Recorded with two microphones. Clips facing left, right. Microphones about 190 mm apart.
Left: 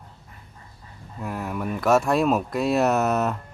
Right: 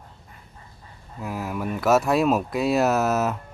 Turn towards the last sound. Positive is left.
turn(degrees=-5)  # may be behind; listen again after turning